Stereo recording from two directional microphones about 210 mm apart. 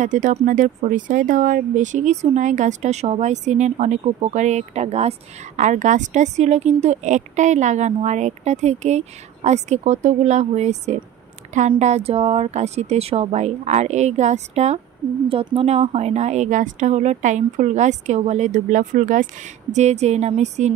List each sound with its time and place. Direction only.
0.0 s a woman's voice: 35° right (ahead or behind)